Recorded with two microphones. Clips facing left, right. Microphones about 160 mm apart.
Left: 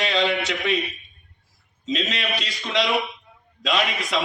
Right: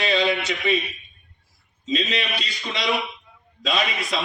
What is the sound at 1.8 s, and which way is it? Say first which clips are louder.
A man's voice: right 1 dB; 80° left.